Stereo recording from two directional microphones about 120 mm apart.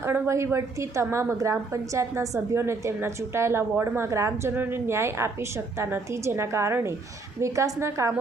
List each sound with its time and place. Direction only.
0.0 s a woman's voice: 20° right (ahead or behind)